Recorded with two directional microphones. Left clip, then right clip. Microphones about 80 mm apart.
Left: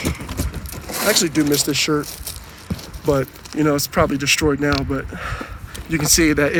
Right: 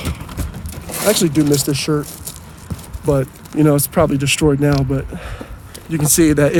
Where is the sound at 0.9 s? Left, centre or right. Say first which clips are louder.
Right 3 dB; centre.